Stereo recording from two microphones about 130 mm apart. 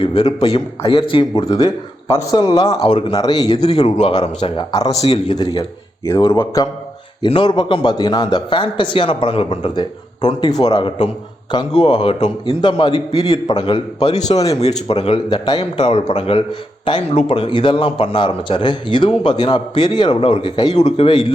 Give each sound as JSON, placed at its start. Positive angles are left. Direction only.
{"t": 0.0, "sound": "a man's voice", "side_deg": 45}
{"t": 2.0, "sound": "speech", "side_deg": 30}
{"t": 2.8, "sound": "a man's voice", "side_deg": 50}
{"t": 3.1, "sound": "a man's voice", "side_deg": 30}
{"t": 3.6, "sound": "a man's voice", "side_deg": 55}
{"t": 4.7, "sound": "speech", "side_deg": 30}
{"t": 4.9, "sound": "a man's voice", "side_deg": 55}
{"t": 5.4, "sound": "a man's voice", "side_deg": 35}
{"t": 6.4, "sound": "speech", "side_deg": 25}
{"t": 7.3, "sound": "a man's voice", "side_deg": 35}
{"t": 15.8, "sound": "a man's voice", "side_deg": 50}